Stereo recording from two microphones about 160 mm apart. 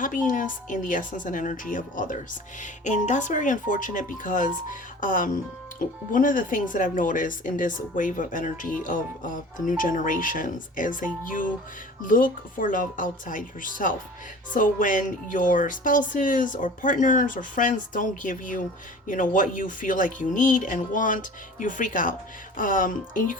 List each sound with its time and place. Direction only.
0.0 s speech: 55° left (ahead or behind)